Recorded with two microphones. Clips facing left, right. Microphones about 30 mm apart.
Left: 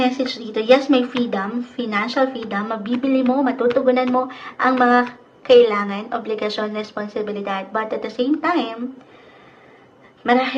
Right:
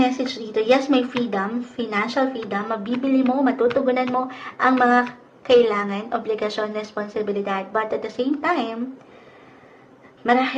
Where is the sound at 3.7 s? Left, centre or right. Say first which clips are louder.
Left 3 dB; centre.